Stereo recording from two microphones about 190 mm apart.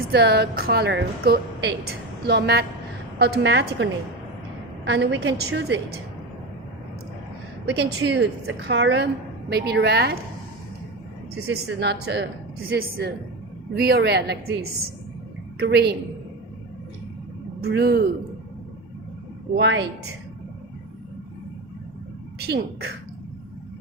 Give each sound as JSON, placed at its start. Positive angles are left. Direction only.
{"t": 0.1, "sound": "a woman's voice", "side_deg": -60}
{"t": 4.9, "sound": "a woman's voice", "side_deg": -70}
{"t": 7.8, "sound": "a woman's voice", "side_deg": -65}
{"t": 9.5, "sound": "a woman's voice", "side_deg": -60}
{"t": 11.3, "sound": "a woman's voice", "side_deg": -90}
{"t": 15.5, "sound": "a woman's voice", "side_deg": -60}
{"t": 17.6, "sound": "a woman's voice", "side_deg": -60}
{"t": 19.5, "sound": "a woman's voice", "side_deg": -70}
{"t": 22.4, "sound": "a woman's voice", "side_deg": -60}